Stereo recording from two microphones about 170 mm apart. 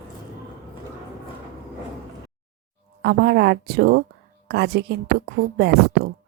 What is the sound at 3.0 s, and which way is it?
Speech, 75° right (ahead or behind).